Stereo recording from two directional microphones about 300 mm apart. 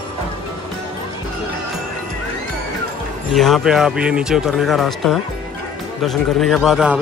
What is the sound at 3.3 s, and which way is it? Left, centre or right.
Speech, centre.